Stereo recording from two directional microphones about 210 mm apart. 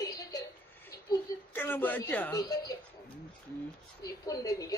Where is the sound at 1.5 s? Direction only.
10° left (ahead or behind).